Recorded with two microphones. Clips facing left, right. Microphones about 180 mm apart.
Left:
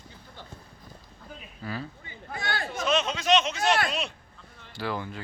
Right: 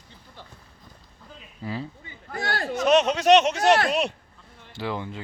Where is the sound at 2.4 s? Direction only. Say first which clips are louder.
Right 4 dB; 40° right (ahead or behind).